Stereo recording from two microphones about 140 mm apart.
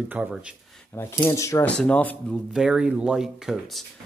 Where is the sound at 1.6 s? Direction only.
10° left (ahead or behind).